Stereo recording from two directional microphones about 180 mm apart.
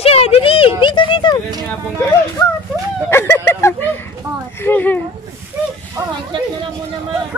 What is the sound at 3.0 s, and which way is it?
A woman's voice, 15° left (ahead or behind).